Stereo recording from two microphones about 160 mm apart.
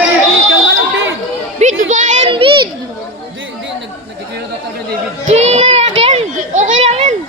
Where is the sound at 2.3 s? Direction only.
35° right (ahead or behind).